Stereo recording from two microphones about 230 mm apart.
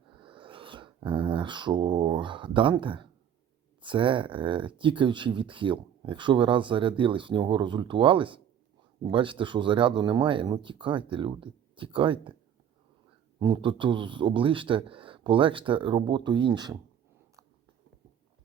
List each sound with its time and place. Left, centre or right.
0.2 s a sound: right
3.8 s speech: right
13.4 s speech: right